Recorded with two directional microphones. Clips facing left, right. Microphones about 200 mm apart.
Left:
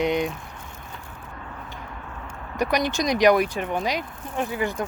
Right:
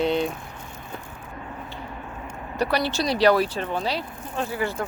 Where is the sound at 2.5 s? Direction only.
15° left (ahead or behind).